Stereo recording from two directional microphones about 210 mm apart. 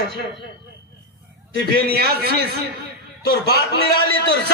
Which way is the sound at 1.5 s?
45° right (ahead or behind).